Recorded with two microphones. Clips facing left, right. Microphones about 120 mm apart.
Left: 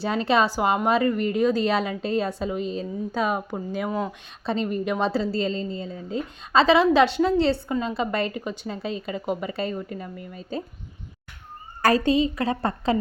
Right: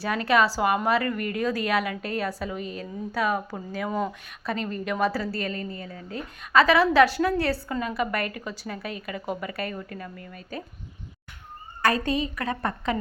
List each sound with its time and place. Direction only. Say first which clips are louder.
0.0 s a woman's voice: left 1 dB; 25° left (ahead or behind)
11.8 s a woman's voice: left 5 dB; 35° left (ahead or behind)